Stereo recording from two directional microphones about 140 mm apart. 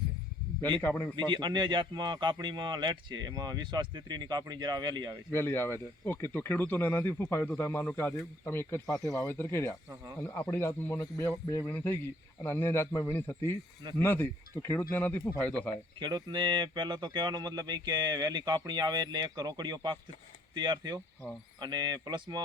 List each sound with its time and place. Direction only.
0.8 s speech: 15° left (ahead or behind)
1.1 s speech: 35° right (ahead or behind)
5.3 s speech: 15° left (ahead or behind)
9.9 s speech: 25° right (ahead or behind)
10.2 s speech: 10° left (ahead or behind)
16.0 s speech: 35° right (ahead or behind)